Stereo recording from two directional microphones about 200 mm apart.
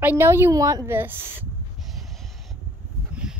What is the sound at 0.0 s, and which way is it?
A woman's voice, 10° right (ahead or behind).